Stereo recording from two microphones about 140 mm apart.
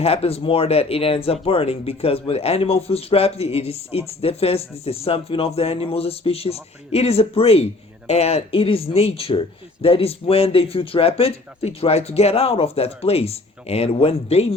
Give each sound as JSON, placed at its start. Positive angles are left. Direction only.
{"t": 0.0, "sound": "speech", "side_deg": 45}